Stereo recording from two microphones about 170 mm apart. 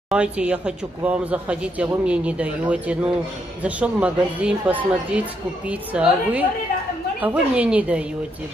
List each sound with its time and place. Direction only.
0.1 s speech: 5° right (ahead or behind)